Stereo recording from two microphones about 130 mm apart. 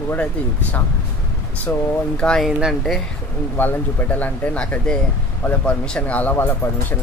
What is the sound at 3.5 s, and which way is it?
Speech, 15° left (ahead or behind).